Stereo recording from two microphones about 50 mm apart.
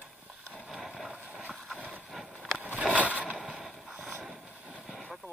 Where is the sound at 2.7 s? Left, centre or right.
Right.